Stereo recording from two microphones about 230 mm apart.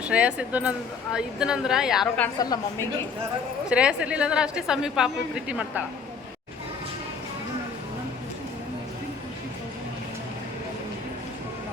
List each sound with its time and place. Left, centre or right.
0.0 s a woman's voice: centre
2.4 s a woman's voice: centre
3.7 s a woman's voice: centre